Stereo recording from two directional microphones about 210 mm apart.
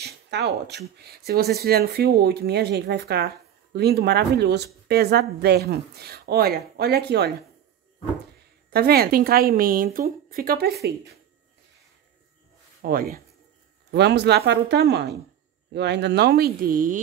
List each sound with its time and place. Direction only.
0.0 s speech: 55° right (ahead or behind)
8.6 s speech: 45° right (ahead or behind)
12.8 s speech: 45° right (ahead or behind)